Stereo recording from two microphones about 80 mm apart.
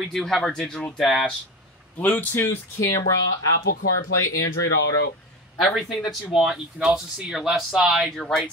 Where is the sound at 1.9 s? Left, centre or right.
Left.